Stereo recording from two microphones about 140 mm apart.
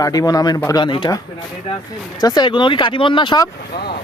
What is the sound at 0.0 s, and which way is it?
Speech, 25° left (ahead or behind).